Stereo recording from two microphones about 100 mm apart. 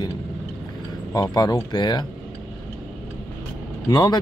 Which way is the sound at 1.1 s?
40° left (ahead or behind).